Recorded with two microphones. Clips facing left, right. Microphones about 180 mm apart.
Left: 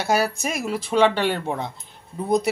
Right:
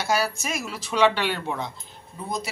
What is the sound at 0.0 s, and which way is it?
Speech, 55° left (ahead or behind).